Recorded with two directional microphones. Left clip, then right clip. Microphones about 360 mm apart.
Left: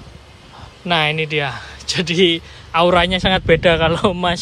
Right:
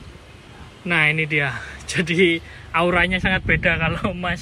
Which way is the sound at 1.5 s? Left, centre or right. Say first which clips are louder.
Left 3 dB; centre.